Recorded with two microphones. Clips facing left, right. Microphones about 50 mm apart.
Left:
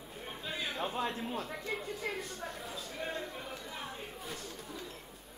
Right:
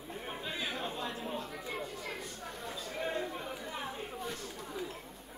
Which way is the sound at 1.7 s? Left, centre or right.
Centre.